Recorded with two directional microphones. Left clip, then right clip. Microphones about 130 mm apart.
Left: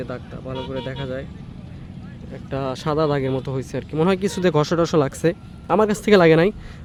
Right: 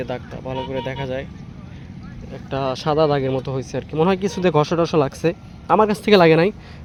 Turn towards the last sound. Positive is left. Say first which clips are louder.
# right 1 dB
turn(degrees=15)  # may be behind; listen again after turning